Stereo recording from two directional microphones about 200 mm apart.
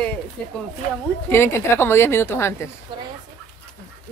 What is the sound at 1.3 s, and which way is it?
Speech, 10° left (ahead or behind).